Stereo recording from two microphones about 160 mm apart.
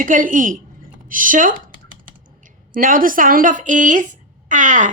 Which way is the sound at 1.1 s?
60° right (ahead or behind).